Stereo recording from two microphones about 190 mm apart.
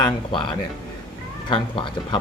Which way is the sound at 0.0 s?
25° left (ahead or behind).